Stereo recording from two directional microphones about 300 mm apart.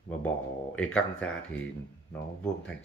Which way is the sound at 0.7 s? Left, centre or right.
Centre.